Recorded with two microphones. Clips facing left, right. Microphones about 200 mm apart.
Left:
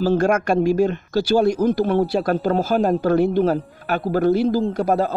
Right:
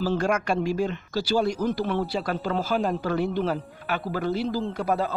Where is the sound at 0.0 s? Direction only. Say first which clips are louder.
Left 7 dB; 45° left (ahead or behind).